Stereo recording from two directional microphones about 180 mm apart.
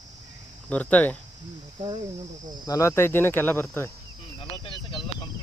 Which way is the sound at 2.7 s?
15° left (ahead or behind).